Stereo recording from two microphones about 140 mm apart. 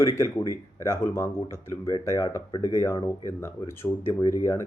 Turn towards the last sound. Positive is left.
turn(degrees=20)  # may be behind; listen again after turning